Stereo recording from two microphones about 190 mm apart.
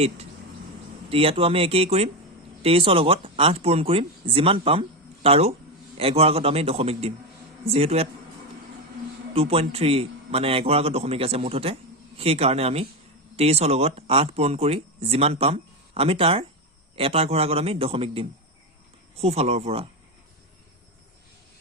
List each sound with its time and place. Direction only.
1.1 s a man's voice: 30° right (ahead or behind)
9.3 s a man's voice: 30° right (ahead or behind)